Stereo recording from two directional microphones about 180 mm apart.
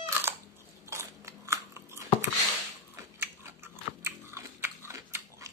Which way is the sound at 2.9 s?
15° right (ahead or behind).